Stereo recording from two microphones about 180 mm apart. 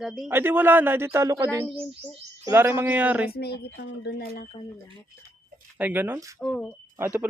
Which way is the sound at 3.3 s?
65° left (ahead or behind).